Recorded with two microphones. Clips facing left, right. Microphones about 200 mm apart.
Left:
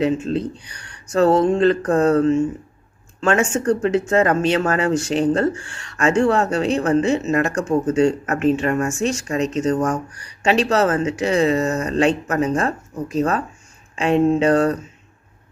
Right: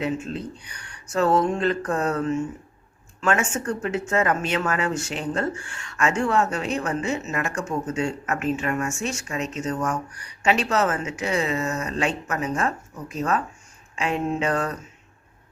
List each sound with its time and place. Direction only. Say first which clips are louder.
0.3 s speech: left 9 dB; 40° left (ahead or behind)